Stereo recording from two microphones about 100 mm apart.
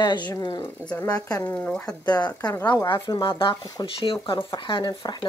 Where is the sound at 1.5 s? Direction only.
15° left (ahead or behind).